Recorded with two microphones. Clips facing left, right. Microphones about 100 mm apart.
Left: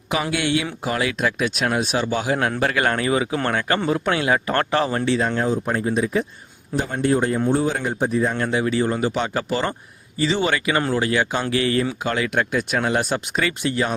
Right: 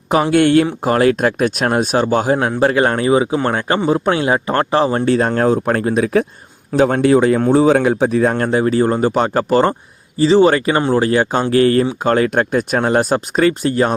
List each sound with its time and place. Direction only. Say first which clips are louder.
0.1 s speech: right 10 dB; 45° right (ahead or behind)
2.4 s speech: right 6 dB; 25° right (ahead or behind)
5.0 s speech: right 6 dB; 50° right (ahead or behind)
5.5 s speech: right 6 dB; 65° right (ahead or behind)
6.7 s speech: right 8 dB; 90° right
8.4 s speech: right 6 dB; 40° right (ahead or behind)